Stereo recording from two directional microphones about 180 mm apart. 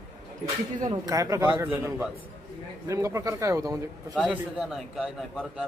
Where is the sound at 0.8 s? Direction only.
20° right (ahead or behind).